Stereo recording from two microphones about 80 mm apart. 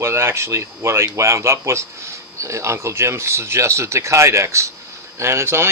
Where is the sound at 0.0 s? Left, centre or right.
Right.